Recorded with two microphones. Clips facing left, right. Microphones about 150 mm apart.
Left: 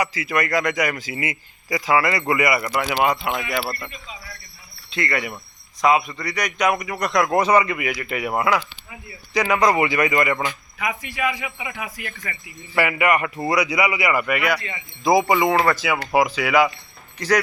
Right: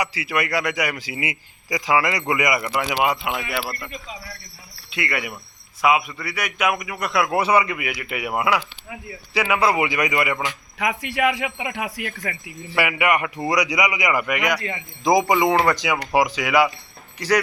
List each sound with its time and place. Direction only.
0.0 s a man's voice: 10° right (ahead or behind)
4.9 s a man's voice: 10° right (ahead or behind)
10.8 s a man's voice: 75° right (ahead or behind)
12.7 s a man's voice: 15° right (ahead or behind)